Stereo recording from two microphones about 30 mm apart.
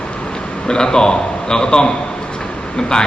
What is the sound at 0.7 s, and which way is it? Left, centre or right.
A man's voice, left.